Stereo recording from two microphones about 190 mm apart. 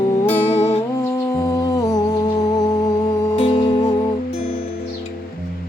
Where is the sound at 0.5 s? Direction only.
35° left (ahead or behind).